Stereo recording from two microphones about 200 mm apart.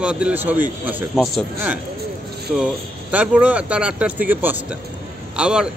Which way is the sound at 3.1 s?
5° right (ahead or behind).